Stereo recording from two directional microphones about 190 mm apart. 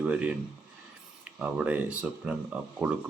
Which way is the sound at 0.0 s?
5° right (ahead or behind).